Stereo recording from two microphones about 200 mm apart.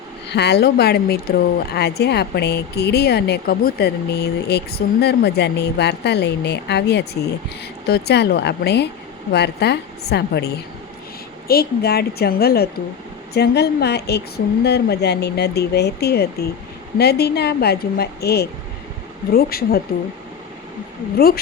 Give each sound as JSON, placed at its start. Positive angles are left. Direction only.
{"t": 0.3, "sound": "a woman's voice", "side_deg": 55}